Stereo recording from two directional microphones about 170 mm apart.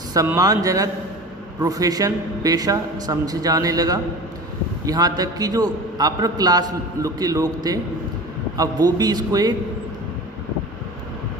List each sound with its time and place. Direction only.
0.1 s a man's voice: 20° right (ahead or behind)